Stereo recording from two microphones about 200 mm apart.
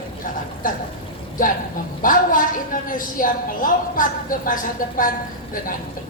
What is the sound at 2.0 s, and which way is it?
A woman's voice, 45° left (ahead or behind).